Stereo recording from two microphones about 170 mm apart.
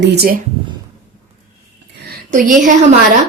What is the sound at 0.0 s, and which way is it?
Speech, 85° right.